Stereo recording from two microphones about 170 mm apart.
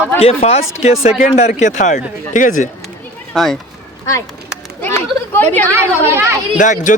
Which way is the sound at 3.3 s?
Centre (ahead or behind).